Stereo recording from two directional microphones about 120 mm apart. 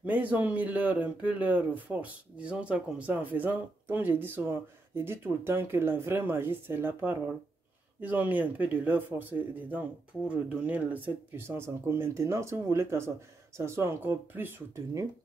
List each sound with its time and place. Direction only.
0.0 s speech: 15° right (ahead or behind)